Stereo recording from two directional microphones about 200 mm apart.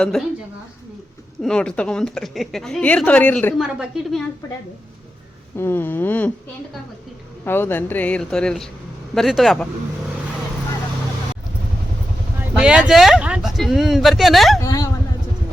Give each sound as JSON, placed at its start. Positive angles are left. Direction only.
{"t": 0.0, "sound": "a woman's voice", "side_deg": 0}
{"t": 1.4, "sound": "a woman's voice", "side_deg": 5}
{"t": 3.6, "sound": "a woman's voice", "side_deg": 0}
{"t": 5.5, "sound": "speech", "side_deg": 10}
{"t": 7.4, "sound": "a woman's voice", "side_deg": 10}
{"t": 12.4, "sound": "vehicle", "side_deg": -5}
{"t": 12.9, "sound": "a woman's voice", "side_deg": 0}
{"t": 14.6, "sound": "speech", "side_deg": 20}